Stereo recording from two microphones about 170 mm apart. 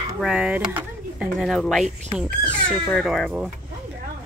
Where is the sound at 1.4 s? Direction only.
Centre (ahead or behind).